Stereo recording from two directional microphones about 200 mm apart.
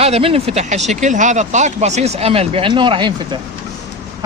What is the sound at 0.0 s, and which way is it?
Speech, 30° right (ahead or behind).